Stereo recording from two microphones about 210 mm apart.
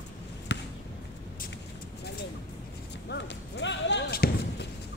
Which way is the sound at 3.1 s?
55° left (ahead or behind).